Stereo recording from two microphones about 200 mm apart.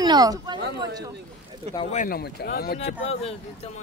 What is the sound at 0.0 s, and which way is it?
Speech, 20° right (ahead or behind).